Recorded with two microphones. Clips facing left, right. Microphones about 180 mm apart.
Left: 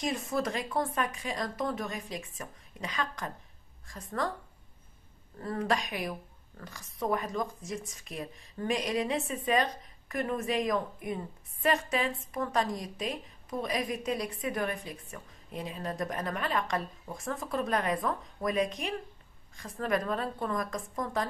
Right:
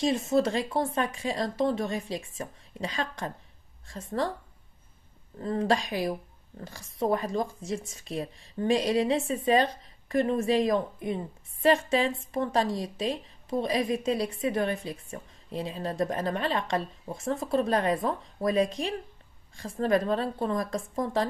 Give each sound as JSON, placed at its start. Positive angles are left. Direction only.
{"t": 0.0, "sound": "a woman's voice", "side_deg": -25}
{"t": 5.4, "sound": "a woman's voice", "side_deg": -25}